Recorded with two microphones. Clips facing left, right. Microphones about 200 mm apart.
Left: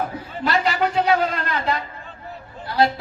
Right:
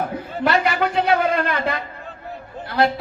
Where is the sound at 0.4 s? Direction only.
60° right (ahead or behind).